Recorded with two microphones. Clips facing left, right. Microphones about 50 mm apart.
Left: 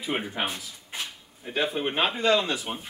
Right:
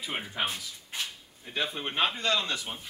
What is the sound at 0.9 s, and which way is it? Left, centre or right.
Speech, centre.